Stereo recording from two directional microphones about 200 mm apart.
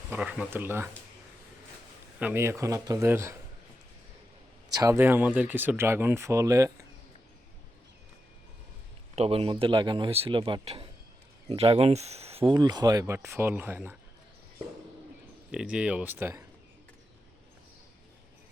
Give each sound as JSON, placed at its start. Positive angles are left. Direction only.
{"t": 0.1, "sound": "speech", "side_deg": -5}
{"t": 2.1, "sound": "speech", "side_deg": -10}
{"t": 4.7, "sound": "speech", "side_deg": -15}
{"t": 9.1, "sound": "speech", "side_deg": -30}
{"t": 15.5, "sound": "speech", "side_deg": -5}